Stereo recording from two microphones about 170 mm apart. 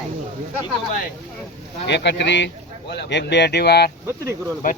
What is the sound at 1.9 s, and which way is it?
Speech, 90° left.